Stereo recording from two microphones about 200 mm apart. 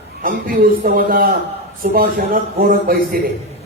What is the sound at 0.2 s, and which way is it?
A man's voice, 45° right (ahead or behind).